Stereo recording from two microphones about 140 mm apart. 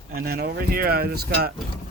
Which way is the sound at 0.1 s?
90° right.